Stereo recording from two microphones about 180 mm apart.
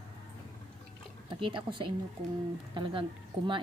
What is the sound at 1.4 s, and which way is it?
Speech, 30° right (ahead or behind).